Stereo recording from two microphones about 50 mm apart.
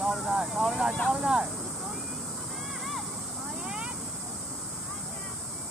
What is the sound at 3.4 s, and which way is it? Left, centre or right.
Vehicle, centre.